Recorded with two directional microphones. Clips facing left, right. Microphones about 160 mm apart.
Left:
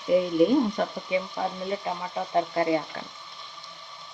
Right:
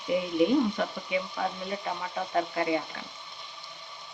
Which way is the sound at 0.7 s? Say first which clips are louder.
Left 3 dB; 30° left (ahead or behind).